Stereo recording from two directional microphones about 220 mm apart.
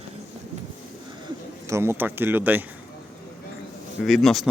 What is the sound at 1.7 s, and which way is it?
Speech, 10° right (ahead or behind).